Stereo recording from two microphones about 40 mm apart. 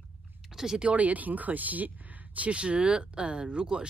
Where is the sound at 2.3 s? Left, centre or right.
Right.